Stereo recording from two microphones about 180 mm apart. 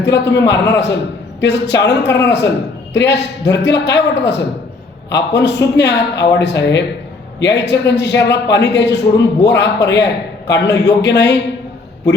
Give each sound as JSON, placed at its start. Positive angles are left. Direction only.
{"t": 0.0, "sound": "a man's voice", "side_deg": 75}